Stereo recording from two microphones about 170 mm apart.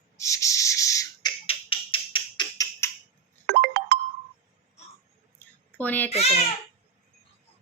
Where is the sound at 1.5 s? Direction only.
30° left (ahead or behind).